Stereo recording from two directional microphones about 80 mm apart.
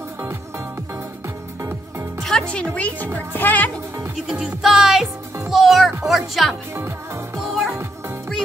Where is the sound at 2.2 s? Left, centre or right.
Centre.